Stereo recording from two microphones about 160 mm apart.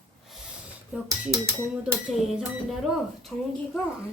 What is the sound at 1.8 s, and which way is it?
Speech, 5° right (ahead or behind).